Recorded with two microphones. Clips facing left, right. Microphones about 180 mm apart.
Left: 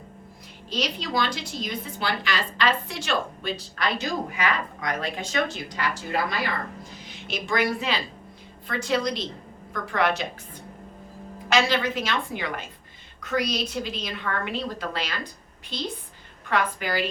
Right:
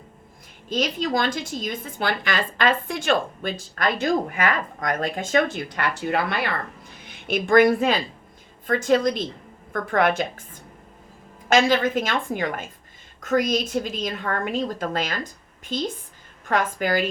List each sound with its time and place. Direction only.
0.7 s a woman's voice: 50° right (ahead or behind)
11.4 s a woman's voice: 50° right (ahead or behind)